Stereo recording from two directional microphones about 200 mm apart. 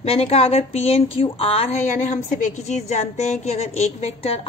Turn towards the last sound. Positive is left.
turn(degrees=30)  # may be behind; listen again after turning